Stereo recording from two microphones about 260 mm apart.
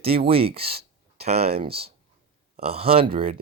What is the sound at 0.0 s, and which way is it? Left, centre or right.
Speech, right.